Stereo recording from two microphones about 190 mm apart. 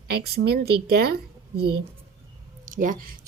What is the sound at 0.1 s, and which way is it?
Speech, 60° right (ahead or behind).